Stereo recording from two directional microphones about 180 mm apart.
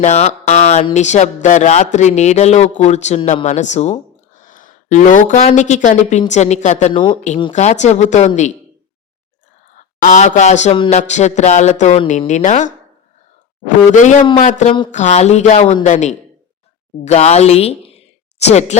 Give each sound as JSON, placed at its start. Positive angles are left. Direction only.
{"t": 0.0, "sound": "speech", "side_deg": 40}
{"t": 6.9, "sound": "speech", "side_deg": 25}
{"t": 7.5, "sound": "speech", "side_deg": 40}
{"t": 9.7, "sound": "speech", "side_deg": 45}
{"t": 13.9, "sound": "speech", "side_deg": 40}